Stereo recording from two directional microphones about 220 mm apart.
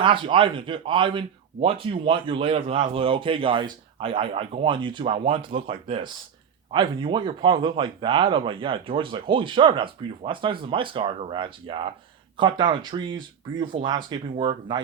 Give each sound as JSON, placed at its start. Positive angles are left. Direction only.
{"t": 0.0, "sound": "a man's voice", "side_deg": -20}